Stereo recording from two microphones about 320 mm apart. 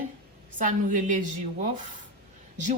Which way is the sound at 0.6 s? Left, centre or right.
Right.